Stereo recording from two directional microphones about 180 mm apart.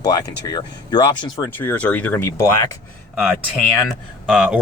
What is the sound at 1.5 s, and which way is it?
Speech, 10° left (ahead or behind).